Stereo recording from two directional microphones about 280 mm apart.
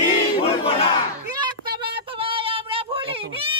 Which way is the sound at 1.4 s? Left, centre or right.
Centre.